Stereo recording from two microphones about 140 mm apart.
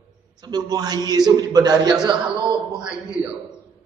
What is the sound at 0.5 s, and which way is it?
A man's voice, 30° right (ahead or behind).